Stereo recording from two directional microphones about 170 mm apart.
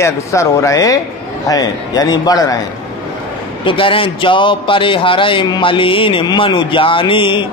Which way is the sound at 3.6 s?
30° left (ahead or behind).